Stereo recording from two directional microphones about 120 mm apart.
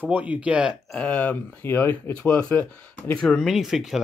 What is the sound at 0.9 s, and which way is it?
Speech, 15° left (ahead or behind).